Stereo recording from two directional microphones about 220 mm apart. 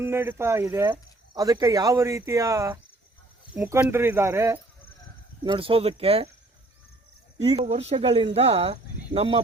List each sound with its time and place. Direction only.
0.0 s speech: 10° right (ahead or behind); by 6.2 s 25° right (ahead or behind)
7.4 s speech: 20° right (ahead or behind)
7.7 s speech: 30° right (ahead or behind)